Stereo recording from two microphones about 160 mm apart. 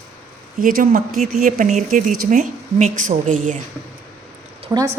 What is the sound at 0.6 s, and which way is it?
Speech, 60° right (ahead or behind).